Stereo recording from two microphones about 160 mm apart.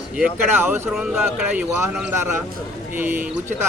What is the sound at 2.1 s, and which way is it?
Speech, 15° right (ahead or behind).